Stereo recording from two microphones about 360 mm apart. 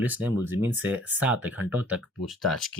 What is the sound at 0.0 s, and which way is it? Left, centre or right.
Speech, centre.